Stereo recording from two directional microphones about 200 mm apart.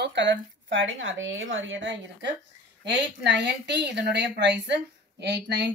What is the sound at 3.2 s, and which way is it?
A woman's voice, 60° right (ahead or behind).